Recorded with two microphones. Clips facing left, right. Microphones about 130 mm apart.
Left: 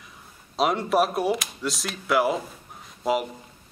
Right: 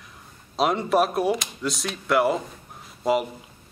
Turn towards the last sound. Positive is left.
turn(degrees=0)  # may be behind; listen again after turning